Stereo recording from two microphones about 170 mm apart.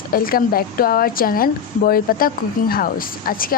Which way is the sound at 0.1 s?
60° left (ahead or behind).